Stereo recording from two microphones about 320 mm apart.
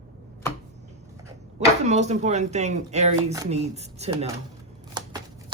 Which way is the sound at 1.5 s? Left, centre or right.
Right.